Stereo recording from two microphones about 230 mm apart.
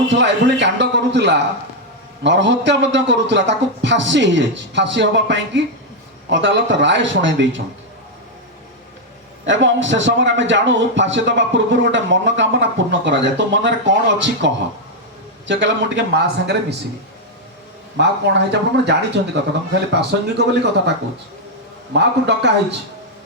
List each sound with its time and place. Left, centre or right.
0.1 s a man's voice: right
9.5 s a man's voice: right
17.9 s a man's voice: right
21.9 s a man's voice: right